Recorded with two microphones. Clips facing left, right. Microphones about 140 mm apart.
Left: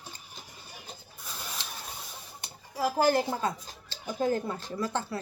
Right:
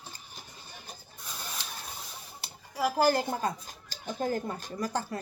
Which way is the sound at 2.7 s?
10° right (ahead or behind).